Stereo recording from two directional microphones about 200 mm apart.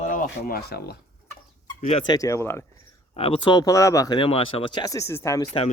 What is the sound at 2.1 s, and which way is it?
Speech, 15° left (ahead or behind).